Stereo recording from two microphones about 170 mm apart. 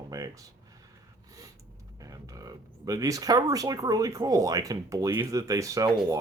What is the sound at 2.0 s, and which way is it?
Speech, 20° right (ahead or behind).